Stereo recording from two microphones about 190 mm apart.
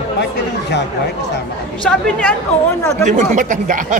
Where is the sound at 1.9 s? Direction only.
5° left (ahead or behind).